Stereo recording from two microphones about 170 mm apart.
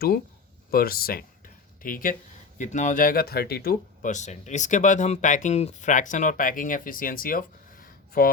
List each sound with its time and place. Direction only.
0.7 s speech: 60° left (ahead or behind)